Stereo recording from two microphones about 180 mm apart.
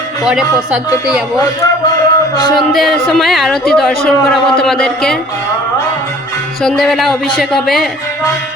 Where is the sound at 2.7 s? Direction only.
Centre (ahead or behind).